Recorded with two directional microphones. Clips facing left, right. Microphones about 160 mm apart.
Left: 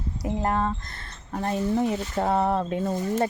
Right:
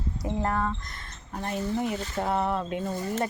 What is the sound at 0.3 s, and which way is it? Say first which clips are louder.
Speech: left 3 dB; 20° left (ahead or behind).